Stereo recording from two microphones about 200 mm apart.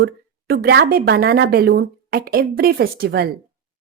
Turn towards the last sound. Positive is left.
turn(degrees=-50)  # may be behind; listen again after turning